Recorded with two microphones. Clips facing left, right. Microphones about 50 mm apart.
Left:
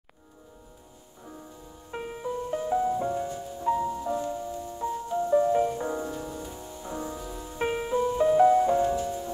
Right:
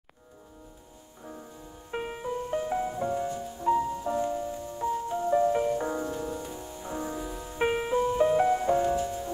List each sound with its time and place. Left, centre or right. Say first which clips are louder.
2.0 s music: even; right
6.3 s music: right 1 dB; right